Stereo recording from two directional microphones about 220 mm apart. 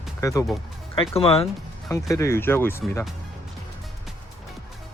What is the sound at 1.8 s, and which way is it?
Speech, 15° left (ahead or behind).